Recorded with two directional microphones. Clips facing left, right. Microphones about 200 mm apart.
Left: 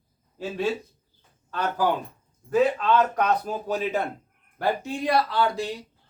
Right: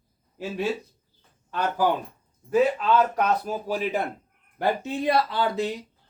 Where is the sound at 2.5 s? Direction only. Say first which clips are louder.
Even; 10° right (ahead or behind).